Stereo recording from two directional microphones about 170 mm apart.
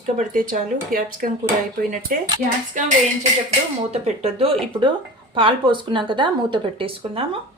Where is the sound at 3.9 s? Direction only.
40° right (ahead or behind).